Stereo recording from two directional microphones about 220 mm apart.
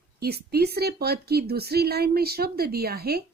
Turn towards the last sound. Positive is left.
turn(degrees=-45)  # may be behind; listen again after turning